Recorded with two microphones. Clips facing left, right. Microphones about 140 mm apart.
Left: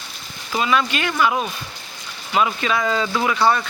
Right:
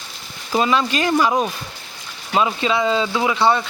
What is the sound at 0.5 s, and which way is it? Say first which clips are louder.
Speech: right 2 dB; 30° right (ahead or behind).